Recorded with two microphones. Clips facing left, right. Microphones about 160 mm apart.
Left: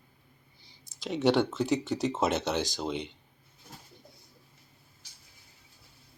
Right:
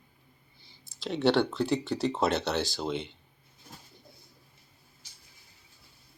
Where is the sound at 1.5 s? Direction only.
20° left (ahead or behind).